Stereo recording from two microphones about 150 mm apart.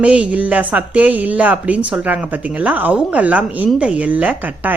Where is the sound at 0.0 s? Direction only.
5° right (ahead or behind).